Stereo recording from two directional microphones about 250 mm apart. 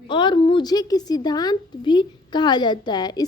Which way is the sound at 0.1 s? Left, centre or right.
Centre.